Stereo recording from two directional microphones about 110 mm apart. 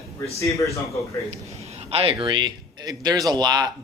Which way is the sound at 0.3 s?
30° left (ahead or behind).